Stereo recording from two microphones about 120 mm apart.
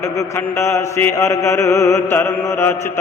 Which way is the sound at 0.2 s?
20° left (ahead or behind).